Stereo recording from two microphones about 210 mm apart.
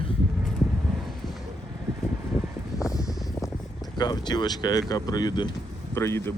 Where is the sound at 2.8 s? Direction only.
15° left (ahead or behind).